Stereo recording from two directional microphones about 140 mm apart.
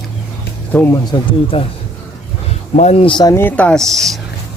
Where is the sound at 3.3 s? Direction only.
10° left (ahead or behind).